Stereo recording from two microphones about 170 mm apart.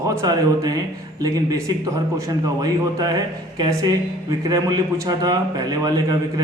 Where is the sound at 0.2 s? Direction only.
20° right (ahead or behind).